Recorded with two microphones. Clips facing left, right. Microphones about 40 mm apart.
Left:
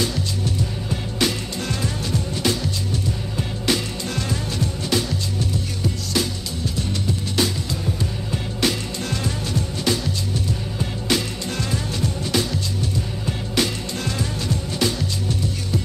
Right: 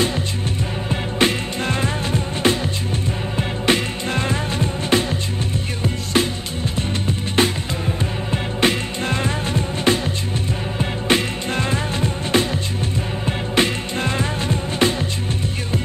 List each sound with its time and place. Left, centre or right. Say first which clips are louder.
0.8 s music: right 5 dB; right
7.1 s music: right 4 dB; right